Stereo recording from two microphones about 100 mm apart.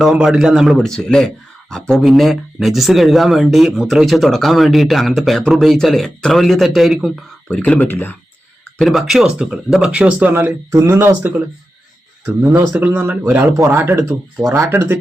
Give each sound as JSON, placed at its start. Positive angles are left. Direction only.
{"t": 0.0, "sound": "speech", "side_deg": -5}
{"t": 7.5, "sound": "speech", "side_deg": 15}
{"t": 8.8, "sound": "speech", "side_deg": 0}
{"t": 10.7, "sound": "speech", "side_deg": -30}
{"t": 12.5, "sound": "speech", "side_deg": -15}